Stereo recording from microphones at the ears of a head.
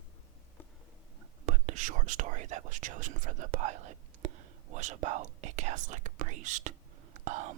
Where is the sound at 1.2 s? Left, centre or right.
Right.